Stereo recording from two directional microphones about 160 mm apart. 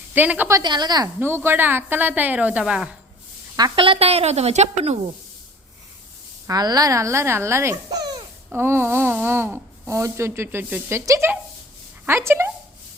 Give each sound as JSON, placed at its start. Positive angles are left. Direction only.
{"t": 0.1, "sound": "speech", "side_deg": -10}
{"t": 0.6, "sound": "speech", "side_deg": -25}
{"t": 3.8, "sound": "a woman's voice", "side_deg": -35}
{"t": 6.5, "sound": "a child's voice", "side_deg": -25}
{"t": 8.4, "sound": "speech", "side_deg": -15}